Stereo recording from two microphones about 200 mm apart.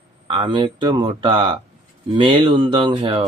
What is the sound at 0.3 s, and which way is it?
Speech, 25° right (ahead or behind).